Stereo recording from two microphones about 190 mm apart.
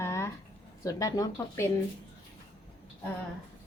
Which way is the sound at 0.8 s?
20° left (ahead or behind).